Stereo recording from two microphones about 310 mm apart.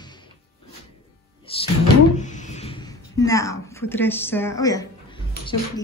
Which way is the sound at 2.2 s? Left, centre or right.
Left.